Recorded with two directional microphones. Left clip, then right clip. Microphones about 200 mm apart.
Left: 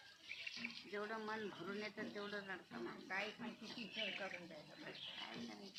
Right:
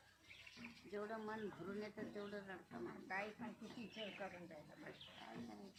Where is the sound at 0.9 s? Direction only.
15° right (ahead or behind).